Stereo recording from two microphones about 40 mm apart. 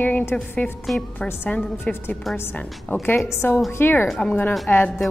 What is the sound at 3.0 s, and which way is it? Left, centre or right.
A woman's voice, left.